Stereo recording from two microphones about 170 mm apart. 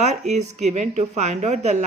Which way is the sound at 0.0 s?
40° right (ahead or behind).